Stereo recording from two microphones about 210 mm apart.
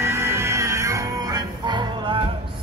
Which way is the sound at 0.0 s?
15° right (ahead or behind).